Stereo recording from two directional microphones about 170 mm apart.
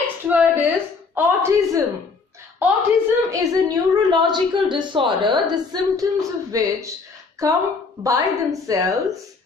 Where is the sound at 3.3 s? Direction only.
25° right (ahead or behind).